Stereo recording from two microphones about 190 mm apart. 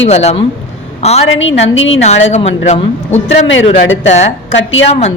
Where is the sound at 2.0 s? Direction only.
35° left (ahead or behind).